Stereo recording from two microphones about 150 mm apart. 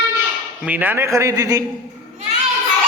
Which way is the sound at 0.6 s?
10° right (ahead or behind).